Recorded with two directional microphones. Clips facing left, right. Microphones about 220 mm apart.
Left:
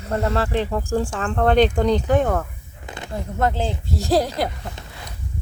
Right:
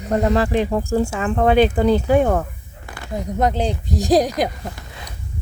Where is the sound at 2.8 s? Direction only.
20° left (ahead or behind).